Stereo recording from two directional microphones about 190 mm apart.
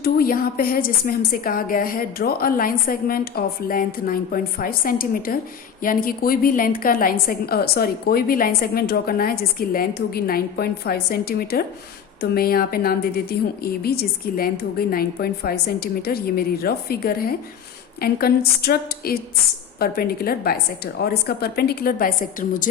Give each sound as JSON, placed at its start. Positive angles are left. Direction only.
{"t": 0.0, "sound": "a woman's voice", "side_deg": 50}